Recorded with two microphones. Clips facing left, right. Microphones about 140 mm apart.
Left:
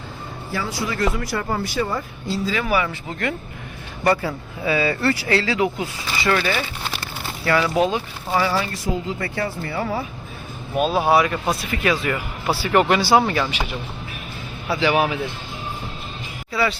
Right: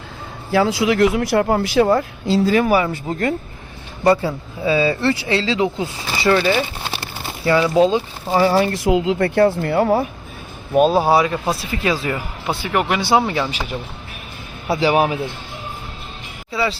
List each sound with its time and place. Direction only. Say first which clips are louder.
0.5 s speech: right 10 dB; 85° right
2.5 s speech: right 4 dB; 45° right (ahead or behind)
4.0 s speech: right 4 dB; 25° right (ahead or behind)
8.6 s speech: right 9 dB; 75° right (ahead or behind)
9.1 s speech: right 11 dB; 50° right (ahead or behind)
10.8 s speech: right 4 dB; 40° right (ahead or behind)
12.6 s speech: left 3 dB; 10° right (ahead or behind)
13.0 s speech: even; 20° right (ahead or behind)
14.7 s speech: right 3 dB; 35° right (ahead or behind)
16.5 s speech: right 1 dB; 25° right (ahead or behind)